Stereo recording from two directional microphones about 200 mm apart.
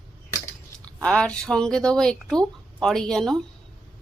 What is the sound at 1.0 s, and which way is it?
A woman's voice, 5° left (ahead or behind).